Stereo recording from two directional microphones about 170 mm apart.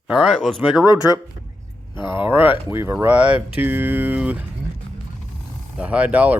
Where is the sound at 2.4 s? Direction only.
30° left (ahead or behind).